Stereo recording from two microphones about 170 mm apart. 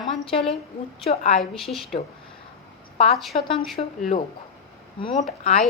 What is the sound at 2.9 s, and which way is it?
A woman's voice, 35° left (ahead or behind).